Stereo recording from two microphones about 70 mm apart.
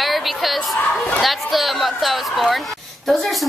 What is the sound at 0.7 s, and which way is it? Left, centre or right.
Speech, left.